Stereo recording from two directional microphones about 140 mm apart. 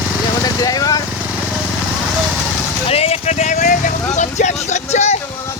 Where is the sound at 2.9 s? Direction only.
45° left (ahead or behind).